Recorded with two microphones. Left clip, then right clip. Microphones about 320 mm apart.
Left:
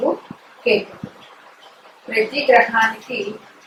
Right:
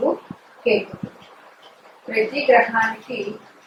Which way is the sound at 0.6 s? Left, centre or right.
Right.